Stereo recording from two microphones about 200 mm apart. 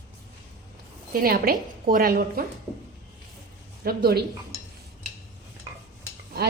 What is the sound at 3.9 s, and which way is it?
Speech, 50° right (ahead or behind).